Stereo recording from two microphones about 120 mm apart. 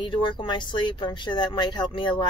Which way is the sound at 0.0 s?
40° left (ahead or behind).